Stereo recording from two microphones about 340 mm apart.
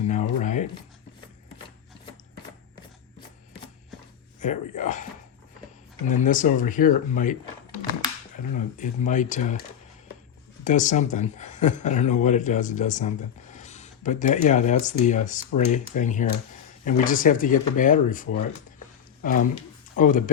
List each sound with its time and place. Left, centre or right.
0.1 s a sound: left
4.8 s speech: left
6.2 s speech: left
8.4 s speech: left
10.6 s speech: left